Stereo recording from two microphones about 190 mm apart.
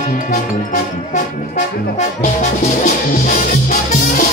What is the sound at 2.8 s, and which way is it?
Music, 45° left (ahead or behind).